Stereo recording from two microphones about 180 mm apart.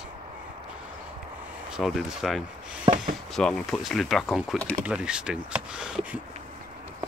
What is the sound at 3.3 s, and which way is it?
Speech, centre (ahead or behind).